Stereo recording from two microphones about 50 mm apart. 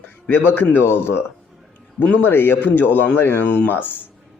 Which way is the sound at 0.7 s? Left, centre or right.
Left.